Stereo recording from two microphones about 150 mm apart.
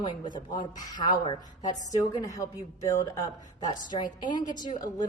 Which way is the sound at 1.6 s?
55° left (ahead or behind).